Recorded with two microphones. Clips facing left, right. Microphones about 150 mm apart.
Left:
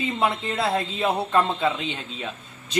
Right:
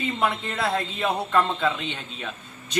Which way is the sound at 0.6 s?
15° left (ahead or behind).